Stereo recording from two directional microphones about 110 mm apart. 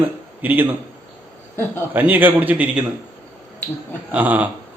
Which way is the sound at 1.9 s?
15° right (ahead or behind).